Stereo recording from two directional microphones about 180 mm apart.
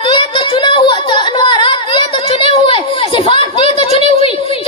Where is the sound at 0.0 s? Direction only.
30° left (ahead or behind).